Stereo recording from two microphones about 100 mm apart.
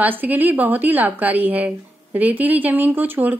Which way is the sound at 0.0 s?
20° right (ahead or behind).